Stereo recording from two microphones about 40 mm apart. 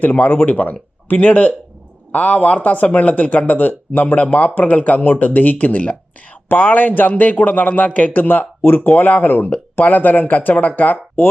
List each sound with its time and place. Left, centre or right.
0.0 s speech: left
8.6 s speech: left